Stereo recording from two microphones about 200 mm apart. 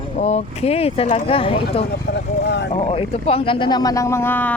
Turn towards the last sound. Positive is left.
turn(degrees=10)  # may be behind; listen again after turning